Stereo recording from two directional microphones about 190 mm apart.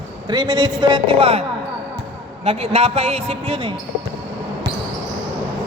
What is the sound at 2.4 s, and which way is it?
A man's voice, 30° right (ahead or behind).